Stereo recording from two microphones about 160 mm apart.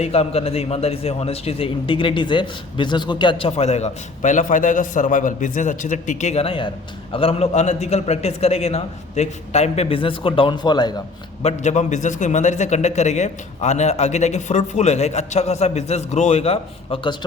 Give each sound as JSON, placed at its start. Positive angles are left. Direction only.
{"t": 0.0, "sound": "a man's voice", "side_deg": 40}
{"t": 11.4, "sound": "a man's voice", "side_deg": 45}